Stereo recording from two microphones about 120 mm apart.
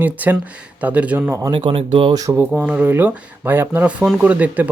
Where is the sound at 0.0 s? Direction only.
15° right (ahead or behind).